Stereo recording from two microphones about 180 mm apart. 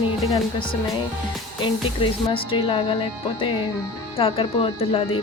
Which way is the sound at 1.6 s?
30° left (ahead or behind).